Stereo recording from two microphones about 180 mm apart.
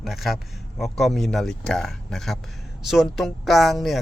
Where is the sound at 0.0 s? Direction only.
Centre (ahead or behind).